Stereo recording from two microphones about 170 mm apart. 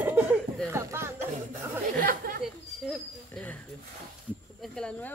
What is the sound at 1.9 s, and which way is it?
Chatter, 55° right (ahead or behind).